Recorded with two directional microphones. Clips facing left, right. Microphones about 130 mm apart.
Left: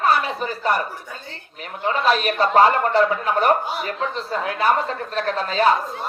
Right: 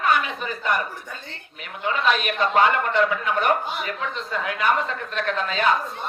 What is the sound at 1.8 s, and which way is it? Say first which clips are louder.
Speech: left 3 dB; 35° left (ahead or behind).